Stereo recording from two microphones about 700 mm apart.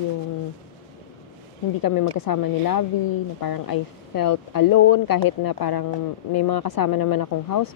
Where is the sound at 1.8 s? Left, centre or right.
Left.